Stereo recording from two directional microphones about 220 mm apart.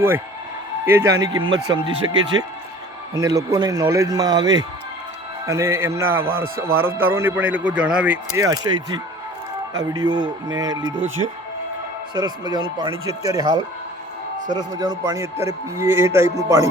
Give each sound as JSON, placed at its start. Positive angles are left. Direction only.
{"t": 0.9, "sound": "a man's voice", "side_deg": -15}
{"t": 3.2, "sound": "a man's voice", "side_deg": -15}